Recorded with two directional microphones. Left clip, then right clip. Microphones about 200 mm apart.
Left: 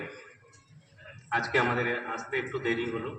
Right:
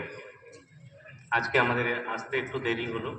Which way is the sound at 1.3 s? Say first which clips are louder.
Right 2 dB; 35° right (ahead or behind).